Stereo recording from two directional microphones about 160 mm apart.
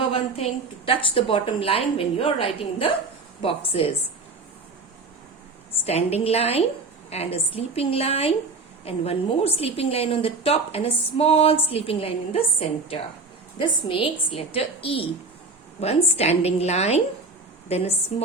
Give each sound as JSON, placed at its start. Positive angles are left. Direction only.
{"t": 0.1, "sound": "a woman's voice", "side_deg": 40}
{"t": 5.8, "sound": "a woman's voice", "side_deg": 40}